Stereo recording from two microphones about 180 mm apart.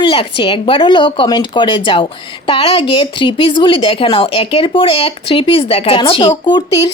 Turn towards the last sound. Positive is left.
turn(degrees=25)  # may be behind; listen again after turning